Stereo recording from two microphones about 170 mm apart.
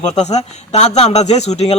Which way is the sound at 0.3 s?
40° left (ahead or behind).